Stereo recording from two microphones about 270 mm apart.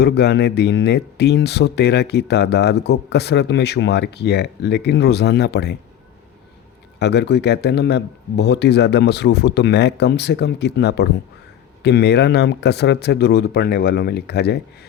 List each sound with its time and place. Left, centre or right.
0.0 s speech: left
7.0 s speech: left